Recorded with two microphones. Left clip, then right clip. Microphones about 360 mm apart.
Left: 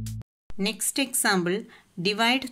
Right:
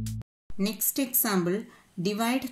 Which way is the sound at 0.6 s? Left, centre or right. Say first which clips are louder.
Left 3 dB; left.